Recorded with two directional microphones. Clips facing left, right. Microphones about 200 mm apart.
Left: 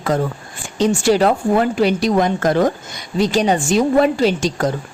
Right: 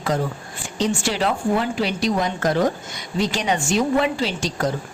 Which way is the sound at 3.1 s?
35° left (ahead or behind).